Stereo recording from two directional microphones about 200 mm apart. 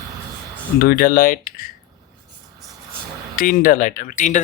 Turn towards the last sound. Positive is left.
turn(degrees=40)  # may be behind; listen again after turning